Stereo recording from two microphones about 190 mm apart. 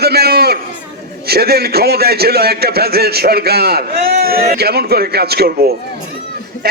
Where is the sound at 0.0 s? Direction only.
55° right (ahead or behind).